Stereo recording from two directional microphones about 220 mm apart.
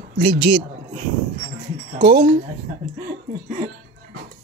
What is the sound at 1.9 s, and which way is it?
Speech, 50° right (ahead or behind).